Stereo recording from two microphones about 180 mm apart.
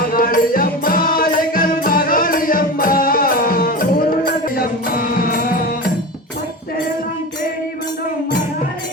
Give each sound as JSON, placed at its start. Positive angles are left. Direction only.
{"t": 0.0, "sound": "music", "side_deg": 50}